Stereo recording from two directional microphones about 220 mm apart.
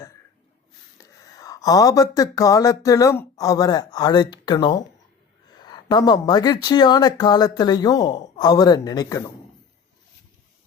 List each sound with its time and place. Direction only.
0.9 s speech: 15° left (ahead or behind)